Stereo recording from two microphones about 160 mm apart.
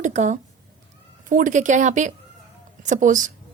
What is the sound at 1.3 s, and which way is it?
A woman's voice, 55° right (ahead or behind).